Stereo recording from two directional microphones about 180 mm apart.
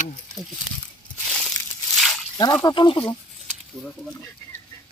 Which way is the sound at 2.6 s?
25° left (ahead or behind).